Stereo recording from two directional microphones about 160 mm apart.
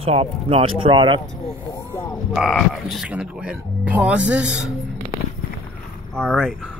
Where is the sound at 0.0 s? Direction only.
35° right (ahead or behind).